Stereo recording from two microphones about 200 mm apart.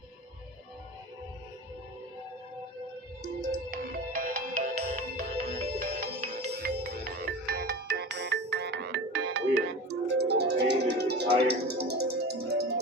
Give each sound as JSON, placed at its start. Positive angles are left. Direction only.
{"t": 3.7, "sound": "music", "side_deg": -50}
{"t": 6.0, "sound": "music", "side_deg": -55}